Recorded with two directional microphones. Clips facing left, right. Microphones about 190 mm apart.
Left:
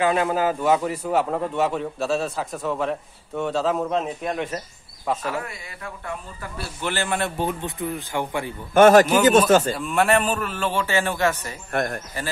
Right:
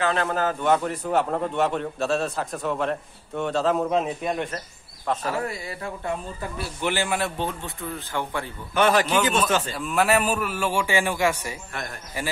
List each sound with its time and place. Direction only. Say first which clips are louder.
0.0 s a man's voice: left 3 dB; 10° left (ahead or behind)
5.4 s speech: right 5 dB; 35° right (ahead or behind); by 7.2 s 15° right (ahead or behind)
7.3 s speech: left 4 dB; 15° left (ahead or behind)
8.7 s speech: left 7 dB; 45° left (ahead or behind)
9.8 s a man's voice: left 2 dB; centre (ahead or behind)
11.7 s speech: left 10 dB; 55° left (ahead or behind)